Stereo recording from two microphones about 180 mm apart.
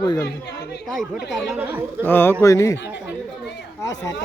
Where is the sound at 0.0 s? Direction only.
25° left (ahead or behind).